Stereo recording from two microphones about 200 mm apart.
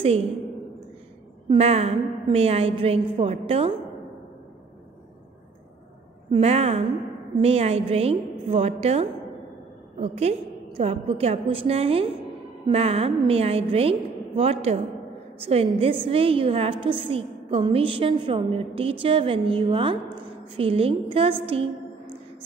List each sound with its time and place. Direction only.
1.5 s a woman's voice: 30° right (ahead or behind)
6.3 s a woman's voice: 30° right (ahead or behind)